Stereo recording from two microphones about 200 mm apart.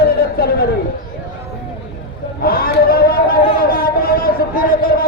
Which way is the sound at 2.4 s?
45° left (ahead or behind).